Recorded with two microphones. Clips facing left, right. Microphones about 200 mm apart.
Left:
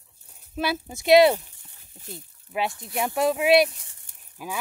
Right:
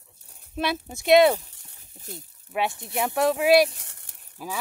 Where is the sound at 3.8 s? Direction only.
75° right (ahead or behind).